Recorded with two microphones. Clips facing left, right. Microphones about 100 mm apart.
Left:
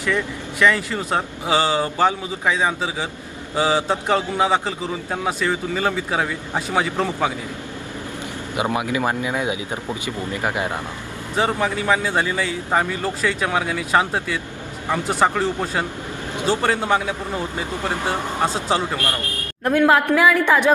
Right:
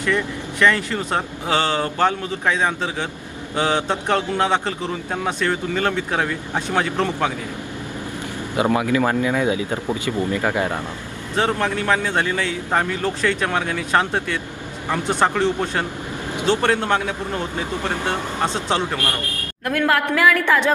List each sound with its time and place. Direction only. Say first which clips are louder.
0.6 s a man's voice: even; 5° left (ahead or behind)
8.7 s speech: right 4 dB; 20° left (ahead or behind)
11.3 s a man's voice: even; 5° left (ahead or behind)
15.1 s a man's voice: right 1 dB; 5° left (ahead or behind)
19.8 s a woman's voice: left 2 dB; 20° left (ahead or behind)